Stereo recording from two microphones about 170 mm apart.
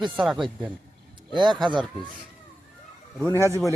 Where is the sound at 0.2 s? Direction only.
Centre (ahead or behind).